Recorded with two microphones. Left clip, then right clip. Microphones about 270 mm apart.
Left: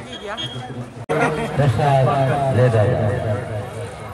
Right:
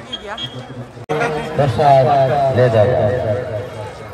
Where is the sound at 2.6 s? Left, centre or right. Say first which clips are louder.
Right 5 dB; right.